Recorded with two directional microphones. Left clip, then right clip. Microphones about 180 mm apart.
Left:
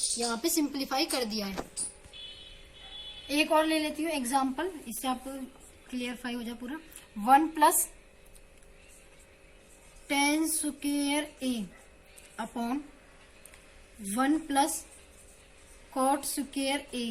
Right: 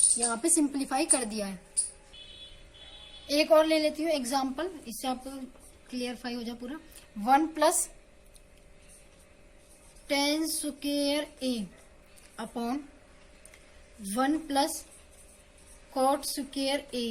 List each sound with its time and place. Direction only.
0.2 s a woman's voice: 55° right (ahead or behind)
3.2 s a woman's voice: 60° right (ahead or behind)
5.9 s child singing: 50° right (ahead or behind)
10.1 s child singing: 50° right (ahead or behind)
14.1 s child singing: 50° right (ahead or behind)
16.0 s child singing: 50° right (ahead or behind)